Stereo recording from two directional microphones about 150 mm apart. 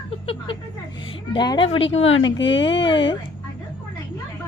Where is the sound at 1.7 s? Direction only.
40° left (ahead or behind).